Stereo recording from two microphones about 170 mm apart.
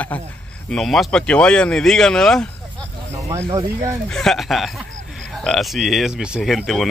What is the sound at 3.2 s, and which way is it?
Speech, 35° right (ahead or behind).